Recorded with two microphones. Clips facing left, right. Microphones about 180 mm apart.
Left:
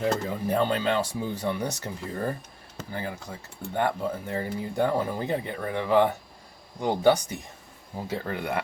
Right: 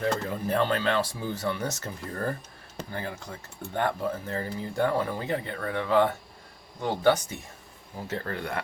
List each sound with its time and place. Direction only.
0.0 s speech: 15° left (ahead or behind)